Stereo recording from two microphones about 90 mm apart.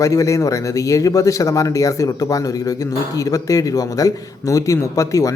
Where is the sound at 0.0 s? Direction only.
35° left (ahead or behind).